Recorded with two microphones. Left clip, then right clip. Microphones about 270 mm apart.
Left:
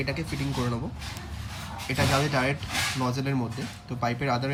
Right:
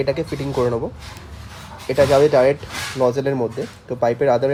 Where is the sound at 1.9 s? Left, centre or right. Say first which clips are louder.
Right 13 dB; right.